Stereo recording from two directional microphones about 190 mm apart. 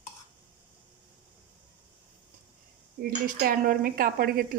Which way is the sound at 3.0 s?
50° right (ahead or behind).